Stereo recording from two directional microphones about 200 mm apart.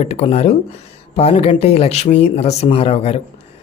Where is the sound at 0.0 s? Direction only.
35° left (ahead or behind).